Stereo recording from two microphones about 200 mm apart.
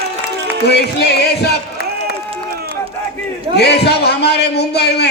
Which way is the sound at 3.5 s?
55° left (ahead or behind).